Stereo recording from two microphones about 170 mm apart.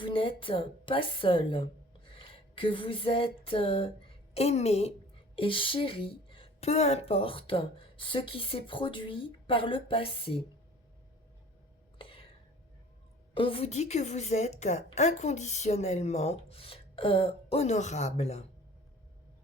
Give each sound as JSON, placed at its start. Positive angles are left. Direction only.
{"t": 0.0, "sound": "a woman's voice", "side_deg": 30}
{"t": 11.9, "sound": "a sound", "side_deg": 30}
{"t": 13.3, "sound": "a woman's voice", "side_deg": 30}